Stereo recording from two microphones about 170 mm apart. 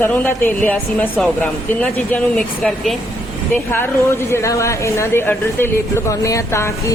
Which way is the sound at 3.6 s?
15° left (ahead or behind).